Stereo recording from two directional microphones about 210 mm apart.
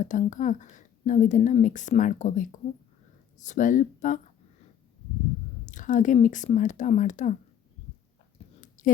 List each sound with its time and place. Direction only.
0.0 s a woman's voice: 35° left (ahead or behind)
5.6 s a woman's voice: 35° left (ahead or behind)
8.4 s a sound: 30° left (ahead or behind)